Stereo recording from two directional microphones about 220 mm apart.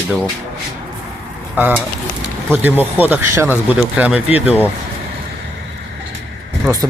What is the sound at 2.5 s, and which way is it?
Speech, 10° right (ahead or behind).